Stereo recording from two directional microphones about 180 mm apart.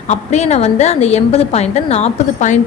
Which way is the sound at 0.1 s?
40° left (ahead or behind).